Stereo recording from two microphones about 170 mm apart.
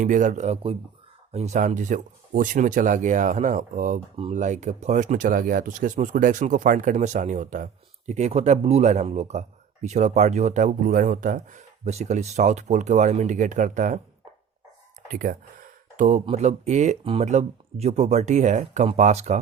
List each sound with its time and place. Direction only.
0.0 s speech: 50° right (ahead or behind)
15.0 s a sound: 55° right (ahead or behind)
16.3 s speech: 40° right (ahead or behind)